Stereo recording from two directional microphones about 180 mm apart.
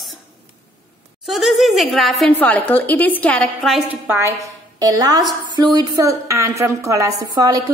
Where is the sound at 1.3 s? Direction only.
Centre (ahead or behind).